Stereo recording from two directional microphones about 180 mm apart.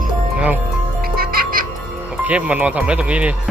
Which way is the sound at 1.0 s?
55° right (ahead or behind).